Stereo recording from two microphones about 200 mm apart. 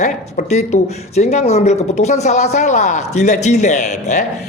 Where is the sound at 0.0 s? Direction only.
40° left (ahead or behind).